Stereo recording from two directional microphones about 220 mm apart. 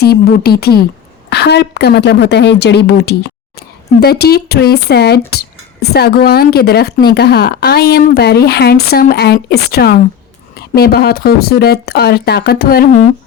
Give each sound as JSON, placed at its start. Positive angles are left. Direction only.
{"t": 0.0, "sound": "speech", "side_deg": 45}